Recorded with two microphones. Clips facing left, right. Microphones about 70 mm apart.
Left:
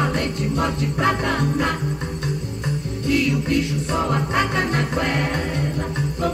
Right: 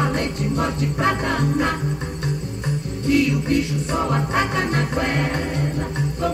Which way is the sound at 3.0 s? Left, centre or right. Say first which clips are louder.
Right 2 dB; right.